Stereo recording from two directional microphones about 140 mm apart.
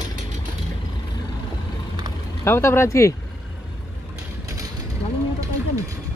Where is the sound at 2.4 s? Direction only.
20° left (ahead or behind).